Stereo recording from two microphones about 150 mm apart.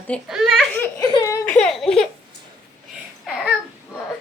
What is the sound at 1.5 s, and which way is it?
Speech, 5° left (ahead or behind).